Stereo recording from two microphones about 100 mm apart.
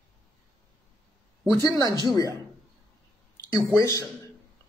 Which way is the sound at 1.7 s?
35° left (ahead or behind).